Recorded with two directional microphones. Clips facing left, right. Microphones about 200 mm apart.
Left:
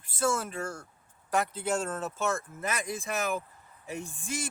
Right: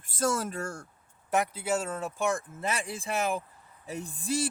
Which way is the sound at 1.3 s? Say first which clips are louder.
Right 1 dB; 10° right (ahead or behind).